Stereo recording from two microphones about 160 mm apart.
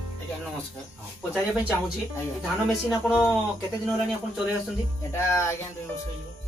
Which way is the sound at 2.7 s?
5° right (ahead or behind).